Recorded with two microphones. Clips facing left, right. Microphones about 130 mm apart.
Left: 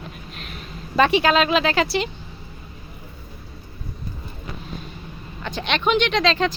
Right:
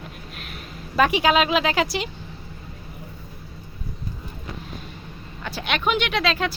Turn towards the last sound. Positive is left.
turn(degrees=-5)  # may be behind; listen again after turning